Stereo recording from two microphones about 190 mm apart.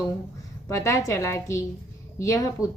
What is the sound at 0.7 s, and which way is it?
A woman's voice, 15° left (ahead or behind).